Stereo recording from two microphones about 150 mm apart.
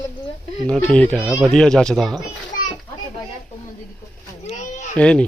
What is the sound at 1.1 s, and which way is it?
Speech, 5° right (ahead or behind).